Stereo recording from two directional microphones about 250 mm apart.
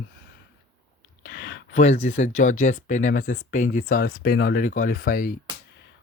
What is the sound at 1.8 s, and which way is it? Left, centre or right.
Speech, left.